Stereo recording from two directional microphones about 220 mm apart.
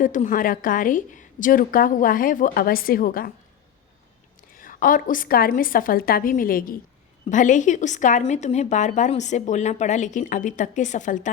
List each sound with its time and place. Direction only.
0.0 s a woman's voice: 35° left (ahead or behind)
4.5 s a woman's voice: 40° left (ahead or behind)